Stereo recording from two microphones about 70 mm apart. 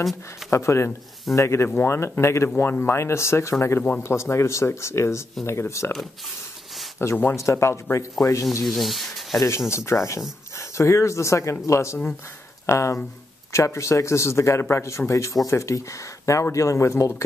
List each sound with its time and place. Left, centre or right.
0.5 s speech: left
7.0 s speech: left
7.3 s speech: left
8.6 s speech: centre
9.7 s speech: left